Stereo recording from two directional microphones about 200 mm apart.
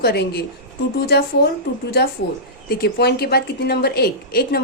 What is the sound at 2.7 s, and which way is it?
A woman's voice, 55° left (ahead or behind).